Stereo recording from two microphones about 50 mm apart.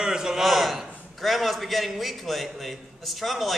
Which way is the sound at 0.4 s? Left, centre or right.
Centre.